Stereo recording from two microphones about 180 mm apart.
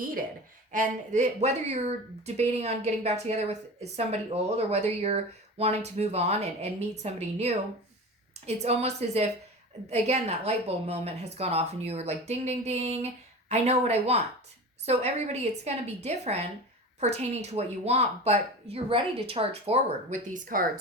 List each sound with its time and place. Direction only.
0.0 s speech: 50° right (ahead or behind)